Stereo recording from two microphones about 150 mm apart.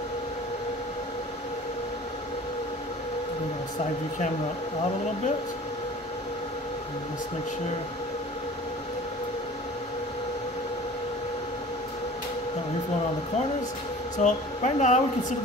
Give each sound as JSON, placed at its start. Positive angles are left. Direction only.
{"t": 14.1, "sound": "speech", "side_deg": 55}